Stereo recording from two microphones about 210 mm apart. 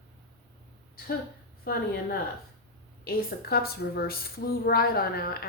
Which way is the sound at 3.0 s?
45° left (ahead or behind).